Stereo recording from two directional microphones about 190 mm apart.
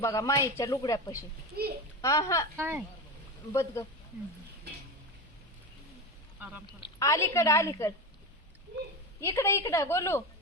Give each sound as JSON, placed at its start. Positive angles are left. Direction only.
{"t": 0.0, "sound": "speech", "side_deg": 15}
{"t": 1.5, "sound": "a child's voice", "side_deg": -55}
{"t": 2.0, "sound": "speech", "side_deg": 15}
{"t": 2.6, "sound": "speech", "side_deg": -10}
{"t": 3.5, "sound": "speech", "side_deg": 15}
{"t": 6.4, "sound": "speech", "side_deg": -10}
{"t": 6.7, "sound": "speech", "side_deg": 20}
{"t": 9.2, "sound": "speech", "side_deg": 15}